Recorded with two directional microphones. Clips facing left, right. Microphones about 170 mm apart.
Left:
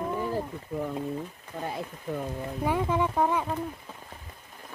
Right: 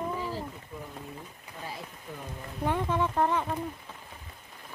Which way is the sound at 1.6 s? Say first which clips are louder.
Left 7 dB; 55° left (ahead or behind).